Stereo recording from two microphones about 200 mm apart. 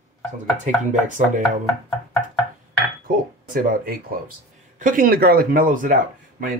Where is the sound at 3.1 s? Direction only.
45° right (ahead or behind).